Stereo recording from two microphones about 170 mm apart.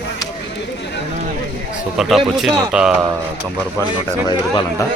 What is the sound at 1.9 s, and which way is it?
Speech, centre (ahead or behind).